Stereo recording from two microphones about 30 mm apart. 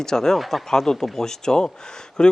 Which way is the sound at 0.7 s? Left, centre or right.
Centre.